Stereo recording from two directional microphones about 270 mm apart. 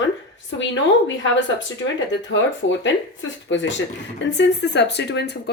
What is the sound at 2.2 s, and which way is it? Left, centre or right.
Speech, left.